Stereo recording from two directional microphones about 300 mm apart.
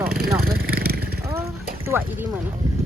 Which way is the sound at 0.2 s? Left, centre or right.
Right.